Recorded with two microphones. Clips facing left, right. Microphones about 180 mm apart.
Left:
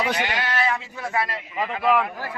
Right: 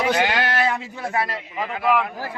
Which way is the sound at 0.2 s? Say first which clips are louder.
Right 5 dB; 85° right.